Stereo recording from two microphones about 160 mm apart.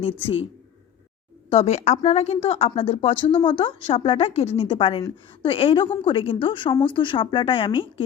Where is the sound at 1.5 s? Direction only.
40° left (ahead or behind).